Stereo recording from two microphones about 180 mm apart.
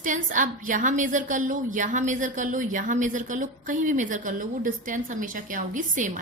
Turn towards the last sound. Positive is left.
turn(degrees=-45)  # may be behind; listen again after turning